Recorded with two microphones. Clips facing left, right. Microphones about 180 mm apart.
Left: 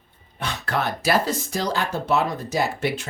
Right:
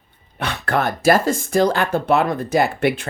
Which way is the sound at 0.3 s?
60° right (ahead or behind).